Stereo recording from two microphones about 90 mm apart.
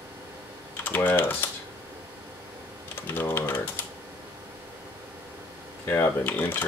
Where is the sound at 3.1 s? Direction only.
25° left (ahead or behind).